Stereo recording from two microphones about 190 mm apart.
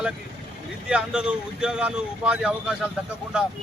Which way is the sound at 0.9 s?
5° right (ahead or behind).